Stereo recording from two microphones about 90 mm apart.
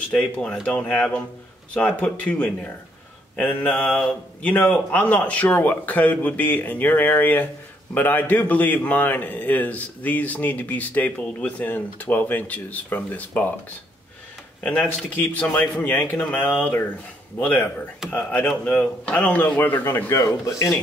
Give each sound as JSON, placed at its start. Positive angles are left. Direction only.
{"t": 0.1, "sound": "a man's voice", "side_deg": 10}
{"t": 14.6, "sound": "a man's voice", "side_deg": 10}